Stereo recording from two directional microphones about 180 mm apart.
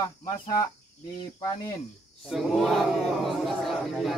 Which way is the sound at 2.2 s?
Centre (ahead or behind).